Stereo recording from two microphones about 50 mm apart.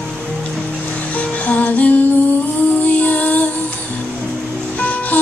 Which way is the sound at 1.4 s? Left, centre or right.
Left.